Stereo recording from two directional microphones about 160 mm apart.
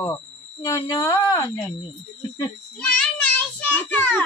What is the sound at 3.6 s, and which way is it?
Child singing, 10° left (ahead or behind).